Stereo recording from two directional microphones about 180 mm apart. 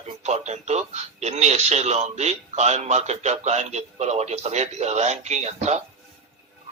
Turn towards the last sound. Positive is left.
turn(degrees=-40)  # may be behind; listen again after turning